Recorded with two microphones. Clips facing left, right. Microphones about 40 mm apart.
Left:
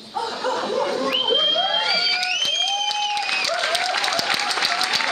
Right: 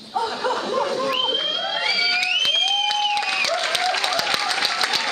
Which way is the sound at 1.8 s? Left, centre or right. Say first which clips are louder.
Even; centre.